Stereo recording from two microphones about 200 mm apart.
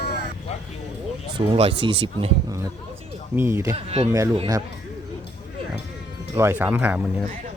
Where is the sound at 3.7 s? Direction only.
30° right (ahead or behind).